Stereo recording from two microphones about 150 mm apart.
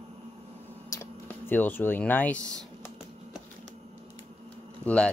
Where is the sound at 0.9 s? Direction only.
20° left (ahead or behind).